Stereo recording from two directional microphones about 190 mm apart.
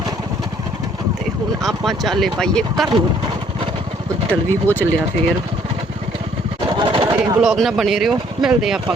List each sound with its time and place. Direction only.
1.6 s speech: centre (ahead or behind)
4.3 s speech: 10° left (ahead or behind)
6.7 s a sound: 30° right (ahead or behind)
7.2 s speech: 10° right (ahead or behind)